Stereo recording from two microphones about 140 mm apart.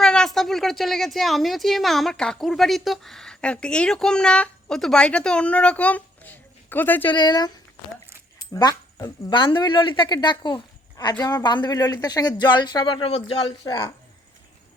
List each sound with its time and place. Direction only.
0.0 s a woman's voice: 5° left (ahead or behind)
7.1 s speech: 30° left (ahead or behind)
9.0 s speech: 35° left (ahead or behind)
13.7 s speech: 30° left (ahead or behind)